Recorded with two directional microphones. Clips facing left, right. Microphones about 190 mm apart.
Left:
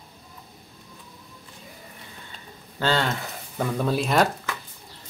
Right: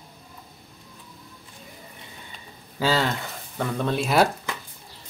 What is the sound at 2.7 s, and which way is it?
Speech, 5° right (ahead or behind).